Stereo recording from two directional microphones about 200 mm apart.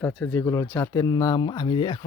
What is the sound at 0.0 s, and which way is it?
Speech, 5° left (ahead or behind).